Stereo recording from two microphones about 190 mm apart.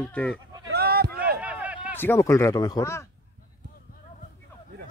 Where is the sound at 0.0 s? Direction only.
5° left (ahead or behind).